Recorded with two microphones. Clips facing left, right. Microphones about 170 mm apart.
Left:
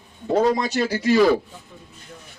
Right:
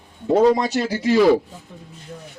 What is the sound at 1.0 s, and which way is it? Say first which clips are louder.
Speech: right 2 dB; 25° right (ahead or behind).